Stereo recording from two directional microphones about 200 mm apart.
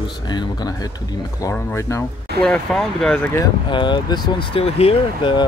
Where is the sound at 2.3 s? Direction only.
5° left (ahead or behind).